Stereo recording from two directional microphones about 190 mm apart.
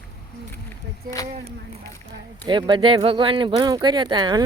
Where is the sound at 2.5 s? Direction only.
25° right (ahead or behind).